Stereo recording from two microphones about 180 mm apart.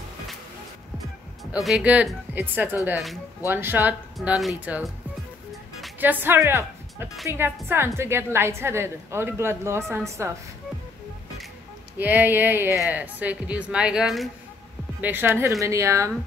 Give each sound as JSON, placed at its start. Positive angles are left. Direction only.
{"t": 1.4, "sound": "a woman's voice", "side_deg": 0}
{"t": 5.9, "sound": "a woman's voice", "side_deg": -10}
{"t": 12.0, "sound": "a woman's voice", "side_deg": -10}